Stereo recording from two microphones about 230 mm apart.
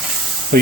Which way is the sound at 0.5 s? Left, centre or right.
Right.